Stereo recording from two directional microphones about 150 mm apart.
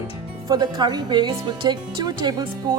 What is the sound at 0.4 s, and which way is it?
Speech, 25° right (ahead or behind).